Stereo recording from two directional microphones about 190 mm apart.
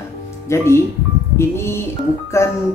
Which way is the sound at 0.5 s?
15° left (ahead or behind).